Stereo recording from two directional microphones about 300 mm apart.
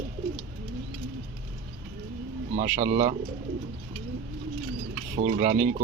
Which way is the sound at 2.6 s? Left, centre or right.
Right.